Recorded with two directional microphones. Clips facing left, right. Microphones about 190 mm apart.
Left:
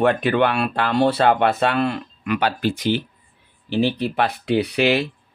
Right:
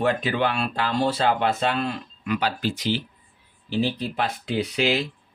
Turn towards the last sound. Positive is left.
turn(degrees=65)  # may be behind; listen again after turning